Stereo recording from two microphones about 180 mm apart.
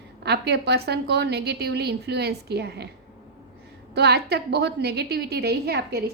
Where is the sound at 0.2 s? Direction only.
65° right (ahead or behind).